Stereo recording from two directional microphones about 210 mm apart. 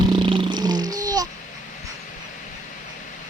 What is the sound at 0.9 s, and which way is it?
Babbling, 20° right (ahead or behind).